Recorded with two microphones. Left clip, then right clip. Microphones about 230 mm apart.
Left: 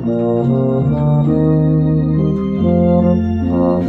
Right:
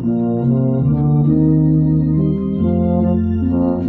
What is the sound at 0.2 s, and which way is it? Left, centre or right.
Organ, left.